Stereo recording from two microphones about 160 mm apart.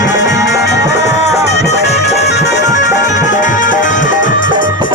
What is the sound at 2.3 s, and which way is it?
Music, 90° left.